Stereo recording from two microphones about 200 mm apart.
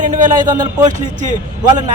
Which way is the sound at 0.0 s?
40° right (ahead or behind).